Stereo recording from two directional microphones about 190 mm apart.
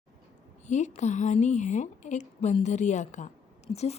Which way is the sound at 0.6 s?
40° left (ahead or behind).